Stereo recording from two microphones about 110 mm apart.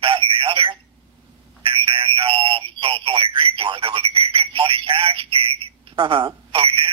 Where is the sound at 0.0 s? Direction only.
60° right (ahead or behind).